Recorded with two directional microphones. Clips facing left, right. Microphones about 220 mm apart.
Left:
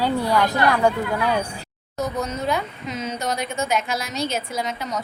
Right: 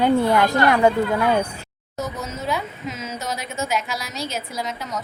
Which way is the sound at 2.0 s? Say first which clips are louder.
Left 3 dB; centre (ahead or behind).